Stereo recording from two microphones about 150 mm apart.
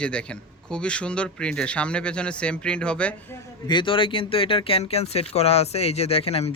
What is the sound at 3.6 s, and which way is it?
Speech, 30° left (ahead or behind).